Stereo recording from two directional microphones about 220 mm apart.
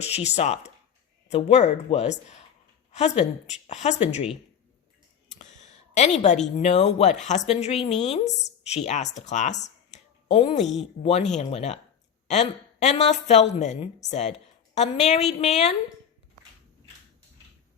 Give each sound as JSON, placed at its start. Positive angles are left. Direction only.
{"t": 0.1, "sound": "a woman's voice", "side_deg": 30}
{"t": 5.3, "sound": "a sound", "side_deg": 35}
{"t": 6.6, "sound": "a woman's voice", "side_deg": 30}